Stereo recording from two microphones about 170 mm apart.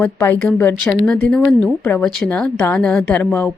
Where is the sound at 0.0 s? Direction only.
10° left (ahead or behind).